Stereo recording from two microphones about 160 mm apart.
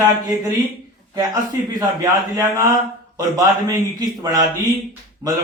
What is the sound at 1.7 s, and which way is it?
Speech, 20° right (ahead or behind).